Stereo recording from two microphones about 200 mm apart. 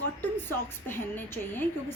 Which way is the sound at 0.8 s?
10° left (ahead or behind).